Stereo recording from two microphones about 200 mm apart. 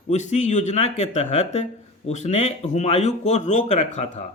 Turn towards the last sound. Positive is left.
turn(degrees=35)  # may be behind; listen again after turning